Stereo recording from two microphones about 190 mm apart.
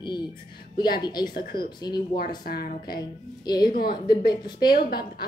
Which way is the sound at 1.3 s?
50° left (ahead or behind).